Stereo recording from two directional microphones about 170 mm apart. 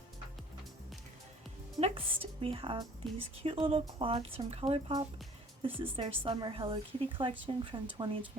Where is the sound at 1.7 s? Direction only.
35° right (ahead or behind).